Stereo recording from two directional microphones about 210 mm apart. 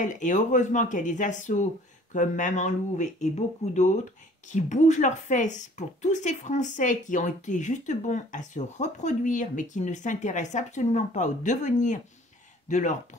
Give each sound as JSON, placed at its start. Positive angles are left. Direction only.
{"t": 0.0, "sound": "speech", "side_deg": 35}